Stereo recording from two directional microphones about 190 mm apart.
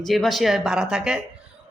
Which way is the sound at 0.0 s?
Centre (ahead or behind).